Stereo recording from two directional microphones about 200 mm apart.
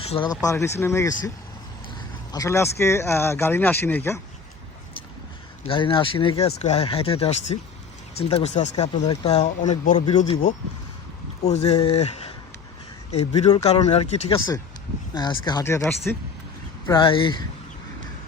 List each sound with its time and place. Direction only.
0.1 s speech: 20° left (ahead or behind)
2.3 s speech: 15° left (ahead or behind)
5.6 s speech: 25° left (ahead or behind)
11.4 s speech: 35° left (ahead or behind)